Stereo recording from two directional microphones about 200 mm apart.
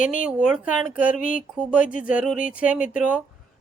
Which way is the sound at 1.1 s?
40° left (ahead or behind).